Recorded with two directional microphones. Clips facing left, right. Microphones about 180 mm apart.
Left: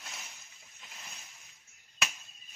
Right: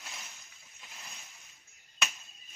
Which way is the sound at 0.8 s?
Centre (ahead or behind).